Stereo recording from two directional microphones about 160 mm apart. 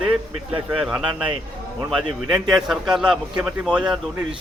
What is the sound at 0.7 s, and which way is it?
A man's voice, 5° right (ahead or behind).